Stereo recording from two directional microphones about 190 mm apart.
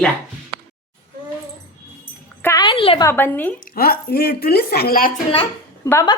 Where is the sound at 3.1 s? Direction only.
10° left (ahead or behind).